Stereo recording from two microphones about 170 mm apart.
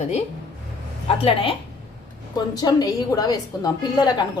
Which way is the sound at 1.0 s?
35° left (ahead or behind).